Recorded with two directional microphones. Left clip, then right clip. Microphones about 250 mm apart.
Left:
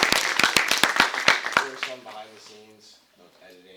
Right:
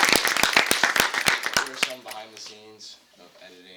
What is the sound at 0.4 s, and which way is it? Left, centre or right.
Clapping, left.